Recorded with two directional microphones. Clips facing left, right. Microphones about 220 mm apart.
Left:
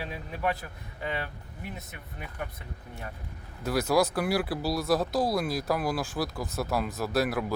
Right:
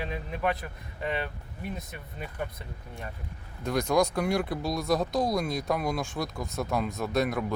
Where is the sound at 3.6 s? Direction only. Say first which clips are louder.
Even; 5° left (ahead or behind).